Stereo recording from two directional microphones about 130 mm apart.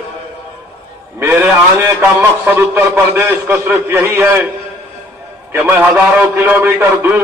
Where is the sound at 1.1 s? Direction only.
15° right (ahead or behind).